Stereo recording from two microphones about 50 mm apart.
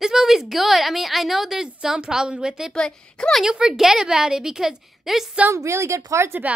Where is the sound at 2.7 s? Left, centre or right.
Centre.